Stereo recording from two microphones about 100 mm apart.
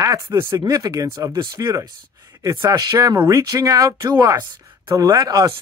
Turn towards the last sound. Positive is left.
turn(degrees=-40)  # may be behind; listen again after turning